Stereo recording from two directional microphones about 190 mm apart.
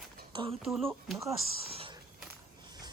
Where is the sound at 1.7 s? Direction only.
30° right (ahead or behind).